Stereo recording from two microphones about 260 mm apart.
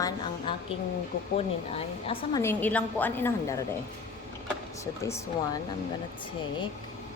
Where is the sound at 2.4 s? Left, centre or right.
Centre.